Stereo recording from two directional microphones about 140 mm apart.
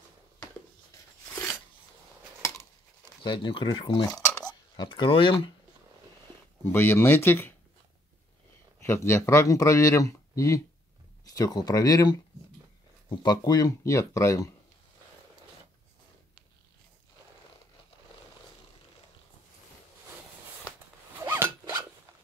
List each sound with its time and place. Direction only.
3.3 s speech: 35° left (ahead or behind)
6.7 s speech: 15° left (ahead or behind)
8.8 s speech: 15° left (ahead or behind)
21.3 s zipper: 15° right (ahead or behind)